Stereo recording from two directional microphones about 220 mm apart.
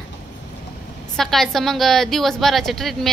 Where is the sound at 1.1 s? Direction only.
Centre (ahead or behind).